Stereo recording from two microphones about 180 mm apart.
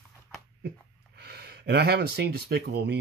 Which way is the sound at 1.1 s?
65° right (ahead or behind).